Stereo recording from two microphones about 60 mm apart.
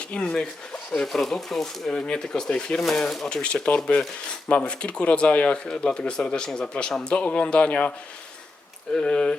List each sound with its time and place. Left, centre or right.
0.0 s speech: centre
0.9 s speech: centre
3.2 s speech: centre
9.0 s speech: centre